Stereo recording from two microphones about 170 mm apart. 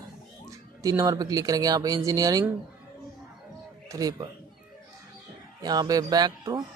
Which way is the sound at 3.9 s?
20° right (ahead or behind).